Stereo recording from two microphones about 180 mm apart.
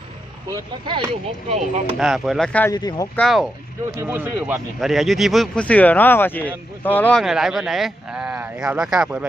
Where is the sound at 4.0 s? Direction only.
10° right (ahead or behind).